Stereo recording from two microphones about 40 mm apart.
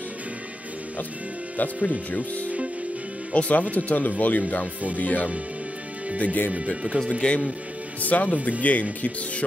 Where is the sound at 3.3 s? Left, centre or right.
Left.